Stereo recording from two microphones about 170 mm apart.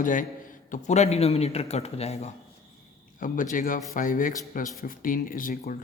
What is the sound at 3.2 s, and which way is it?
Speech, 50° left (ahead or behind).